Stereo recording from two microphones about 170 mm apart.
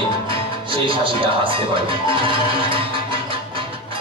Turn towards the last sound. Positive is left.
turn(degrees=-30)  # may be behind; listen again after turning